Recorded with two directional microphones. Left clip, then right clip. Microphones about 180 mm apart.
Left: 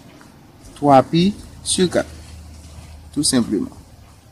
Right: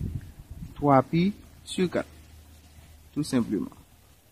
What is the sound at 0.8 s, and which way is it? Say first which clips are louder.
Speech: left 9 dB; 35° right (ahead or behind).